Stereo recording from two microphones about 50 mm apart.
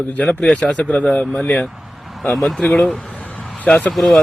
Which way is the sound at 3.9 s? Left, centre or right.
Centre.